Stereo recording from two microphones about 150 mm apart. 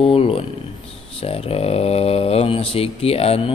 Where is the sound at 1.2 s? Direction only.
40° left (ahead or behind).